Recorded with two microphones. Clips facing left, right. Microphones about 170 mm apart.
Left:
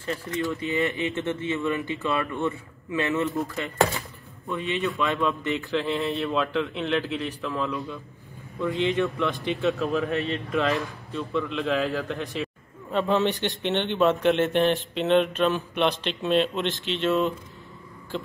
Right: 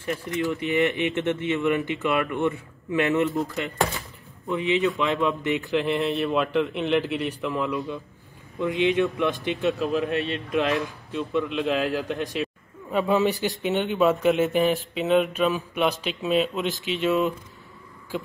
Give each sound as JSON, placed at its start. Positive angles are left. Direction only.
{"t": 0.0, "sound": "speech", "side_deg": -15}
{"t": 9.8, "sound": "a man's voice", "side_deg": 0}
{"t": 10.1, "sound": "a man's voice", "side_deg": 40}
{"t": 10.5, "sound": "speech", "side_deg": -20}
{"t": 12.9, "sound": "a man's voice", "side_deg": -5}